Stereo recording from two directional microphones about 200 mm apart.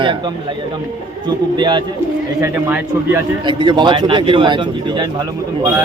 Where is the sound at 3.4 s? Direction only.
25° right (ahead or behind).